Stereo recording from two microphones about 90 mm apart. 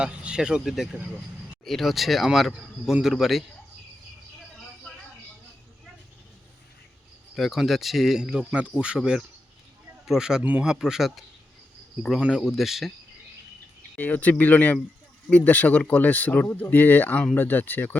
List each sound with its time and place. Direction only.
0.0 s speech: 10° right (ahead or behind)
0.9 s speech: 20° right (ahead or behind)
1.6 s speech: centre (ahead or behind)
7.3 s speech: centre (ahead or behind)
10.4 s speech: 15° right (ahead or behind)
10.7 s speech: 5° right (ahead or behind)
12.2 s speech: 5° right (ahead or behind)
13.9 s speech: 15° left (ahead or behind)